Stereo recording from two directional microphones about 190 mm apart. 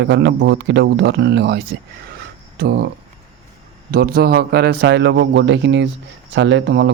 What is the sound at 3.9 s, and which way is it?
Speech, 55° right (ahead or behind).